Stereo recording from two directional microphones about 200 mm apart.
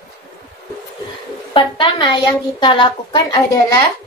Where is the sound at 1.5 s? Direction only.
25° left (ahead or behind).